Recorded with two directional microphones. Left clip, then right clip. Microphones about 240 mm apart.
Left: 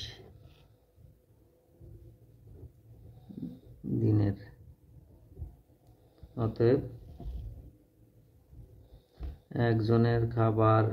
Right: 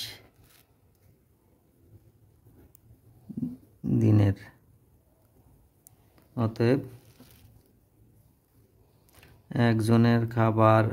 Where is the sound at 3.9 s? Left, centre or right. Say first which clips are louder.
Right 5 dB; right.